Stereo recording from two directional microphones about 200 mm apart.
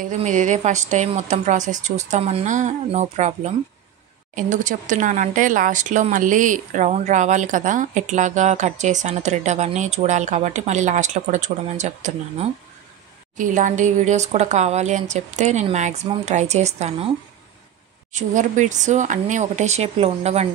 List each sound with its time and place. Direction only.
0.0 s speech: 40° right (ahead or behind)
18.1 s speech: 40° right (ahead or behind)